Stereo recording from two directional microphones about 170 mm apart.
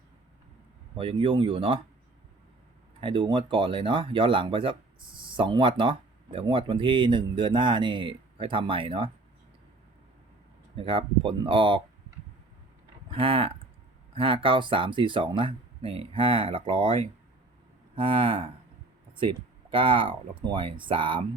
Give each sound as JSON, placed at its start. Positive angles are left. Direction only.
{"t": 0.9, "sound": "speech", "side_deg": -30}
{"t": 3.0, "sound": "speech", "side_deg": -30}
{"t": 10.8, "sound": "speech", "side_deg": -30}
{"t": 13.1, "sound": "speech", "side_deg": -30}
{"t": 19.7, "sound": "speech", "side_deg": -30}